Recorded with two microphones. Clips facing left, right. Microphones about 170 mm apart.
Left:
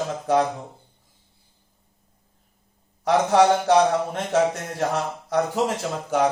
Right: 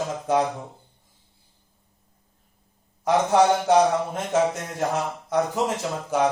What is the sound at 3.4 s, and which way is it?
A man's voice, 65° left (ahead or behind).